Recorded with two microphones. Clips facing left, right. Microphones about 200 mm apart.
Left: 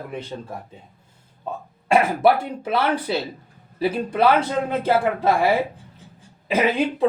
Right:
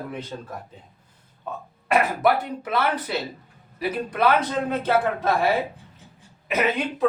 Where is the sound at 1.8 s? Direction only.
30° left (ahead or behind).